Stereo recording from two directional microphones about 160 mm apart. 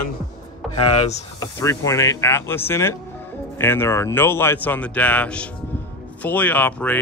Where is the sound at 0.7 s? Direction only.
35° left (ahead or behind).